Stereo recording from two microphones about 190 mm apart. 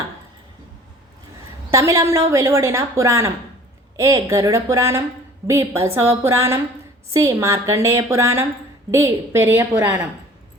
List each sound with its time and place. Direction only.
1.7 s a woman's voice: 15° right (ahead or behind)